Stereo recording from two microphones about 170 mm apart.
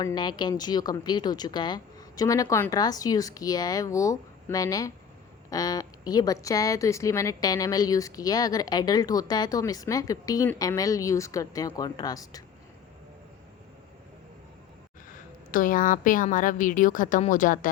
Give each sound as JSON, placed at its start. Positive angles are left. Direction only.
{"t": 0.0, "sound": "speech", "side_deg": 25}
{"t": 15.5, "sound": "a woman's voice", "side_deg": 55}